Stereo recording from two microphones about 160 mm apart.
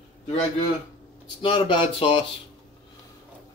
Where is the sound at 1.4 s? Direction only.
30° left (ahead or behind).